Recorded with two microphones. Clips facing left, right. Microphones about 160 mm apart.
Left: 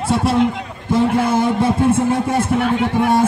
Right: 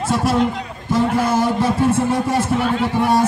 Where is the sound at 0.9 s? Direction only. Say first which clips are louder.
Left 2 dB; 25° left (ahead or behind).